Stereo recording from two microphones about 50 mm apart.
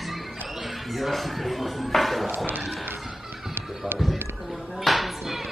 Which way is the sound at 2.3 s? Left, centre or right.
Right.